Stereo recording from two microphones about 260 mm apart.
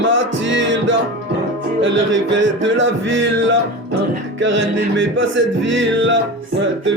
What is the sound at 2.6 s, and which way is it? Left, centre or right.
Music, right.